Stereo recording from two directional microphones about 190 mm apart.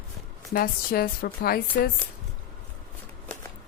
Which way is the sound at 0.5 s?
55° left (ahead or behind).